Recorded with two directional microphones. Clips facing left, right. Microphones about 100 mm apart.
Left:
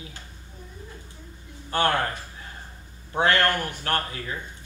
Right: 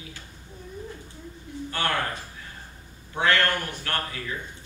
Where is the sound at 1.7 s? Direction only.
40° left (ahead or behind).